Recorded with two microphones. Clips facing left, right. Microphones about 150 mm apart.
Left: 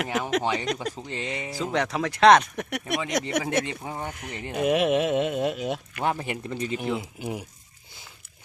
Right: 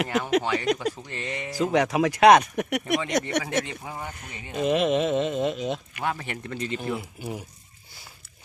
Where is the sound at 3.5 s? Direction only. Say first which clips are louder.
Left 1 dB; 15° left (ahead or behind).